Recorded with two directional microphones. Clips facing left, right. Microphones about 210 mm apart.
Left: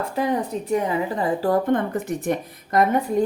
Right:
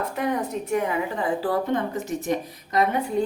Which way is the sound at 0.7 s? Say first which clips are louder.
Left 3 dB; 35° left (ahead or behind).